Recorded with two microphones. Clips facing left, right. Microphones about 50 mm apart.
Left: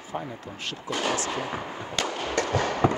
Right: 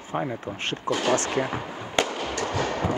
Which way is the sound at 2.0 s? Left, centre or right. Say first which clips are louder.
Right 5 dB; right.